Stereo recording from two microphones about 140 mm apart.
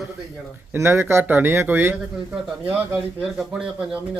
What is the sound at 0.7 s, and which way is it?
Speech, 20° right (ahead or behind).